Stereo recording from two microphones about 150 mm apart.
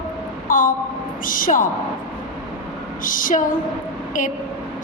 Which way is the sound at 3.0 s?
65° left (ahead or behind).